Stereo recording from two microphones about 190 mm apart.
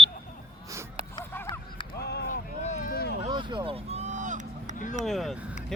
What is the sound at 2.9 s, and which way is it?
Vehicle, 55° left (ahead or behind).